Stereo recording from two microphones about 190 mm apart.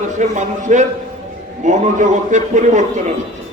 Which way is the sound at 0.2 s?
40° right (ahead or behind).